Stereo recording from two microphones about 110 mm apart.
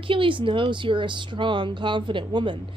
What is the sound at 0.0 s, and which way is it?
Speech, 50° right (ahead or behind).